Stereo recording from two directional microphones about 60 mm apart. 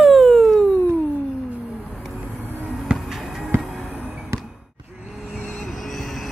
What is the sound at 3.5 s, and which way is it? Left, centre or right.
Music, right.